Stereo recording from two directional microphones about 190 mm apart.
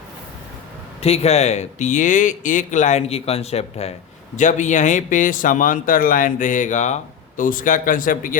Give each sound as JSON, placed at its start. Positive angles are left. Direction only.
{"t": 1.0, "sound": "speech", "side_deg": 35}